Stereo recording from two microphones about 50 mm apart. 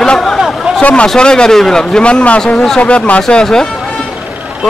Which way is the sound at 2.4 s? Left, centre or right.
Centre.